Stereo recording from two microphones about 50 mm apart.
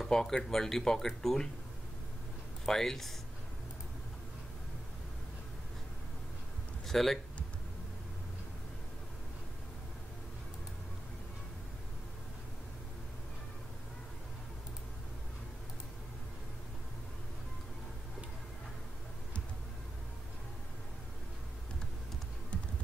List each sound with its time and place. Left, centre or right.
0.0 s speech: centre
2.6 s speech: centre
6.9 s speech: centre
22.5 s music: left